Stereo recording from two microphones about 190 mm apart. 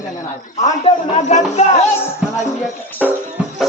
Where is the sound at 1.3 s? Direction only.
35° left (ahead or behind).